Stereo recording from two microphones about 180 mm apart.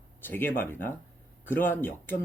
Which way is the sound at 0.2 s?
10° left (ahead or behind).